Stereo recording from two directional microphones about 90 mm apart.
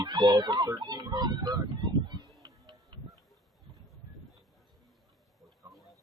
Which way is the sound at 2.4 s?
45° right (ahead or behind).